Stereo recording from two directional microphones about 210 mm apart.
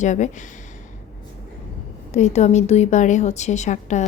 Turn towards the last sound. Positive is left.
turn(degrees=35)  # may be behind; listen again after turning